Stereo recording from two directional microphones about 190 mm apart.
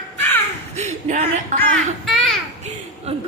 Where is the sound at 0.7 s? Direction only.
35° right (ahead or behind).